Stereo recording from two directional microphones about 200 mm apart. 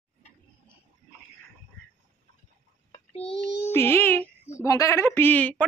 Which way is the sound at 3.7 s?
10° left (ahead or behind).